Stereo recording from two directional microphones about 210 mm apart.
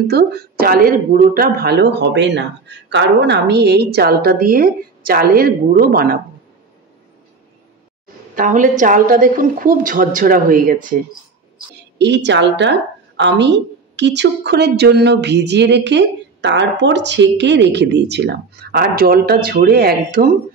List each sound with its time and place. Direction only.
0.1 s a woman's voice: 50° right (ahead or behind)
8.4 s a woman's voice: 35° right (ahead or behind)
12.0 s a woman's voice: 55° right (ahead or behind)